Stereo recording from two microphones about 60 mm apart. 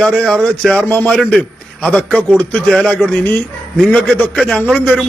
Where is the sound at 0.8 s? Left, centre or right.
Left.